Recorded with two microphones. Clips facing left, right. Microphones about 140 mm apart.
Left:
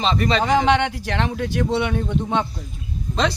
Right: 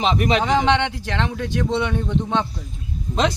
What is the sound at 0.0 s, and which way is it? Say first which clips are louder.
Speech: right 1 dB; 15° right (ahead or behind).